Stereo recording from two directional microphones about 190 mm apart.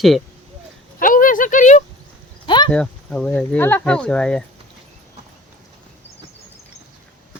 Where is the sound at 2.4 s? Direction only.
25° left (ahead or behind).